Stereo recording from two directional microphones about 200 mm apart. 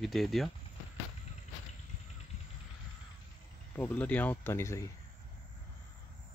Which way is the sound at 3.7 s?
10° left (ahead or behind).